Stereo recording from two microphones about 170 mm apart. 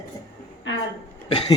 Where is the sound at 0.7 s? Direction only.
90° left.